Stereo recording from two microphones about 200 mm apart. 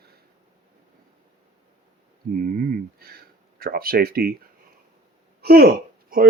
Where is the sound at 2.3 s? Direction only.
45° right (ahead or behind).